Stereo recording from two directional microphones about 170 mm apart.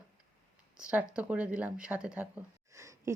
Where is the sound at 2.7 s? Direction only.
15° right (ahead or behind).